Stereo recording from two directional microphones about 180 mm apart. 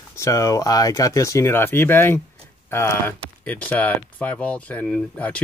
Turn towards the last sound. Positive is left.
turn(degrees=10)  # may be behind; listen again after turning